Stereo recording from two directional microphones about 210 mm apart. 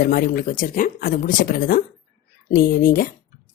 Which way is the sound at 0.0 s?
45° left (ahead or behind).